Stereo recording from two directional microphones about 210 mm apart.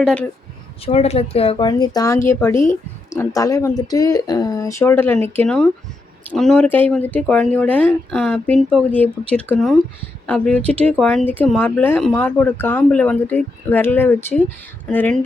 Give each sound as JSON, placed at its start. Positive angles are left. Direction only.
{"t": 0.0, "sound": "speech", "side_deg": 5}
{"t": 0.9, "sound": "speech", "side_deg": 30}